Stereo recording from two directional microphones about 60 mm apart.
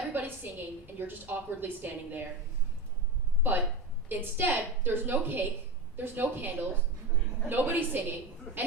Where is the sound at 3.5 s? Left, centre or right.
Right.